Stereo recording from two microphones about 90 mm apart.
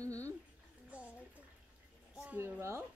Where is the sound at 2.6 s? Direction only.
30° right (ahead or behind).